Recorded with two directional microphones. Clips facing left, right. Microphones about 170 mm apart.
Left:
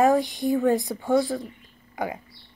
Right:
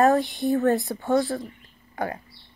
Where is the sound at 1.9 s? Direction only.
15° left (ahead or behind).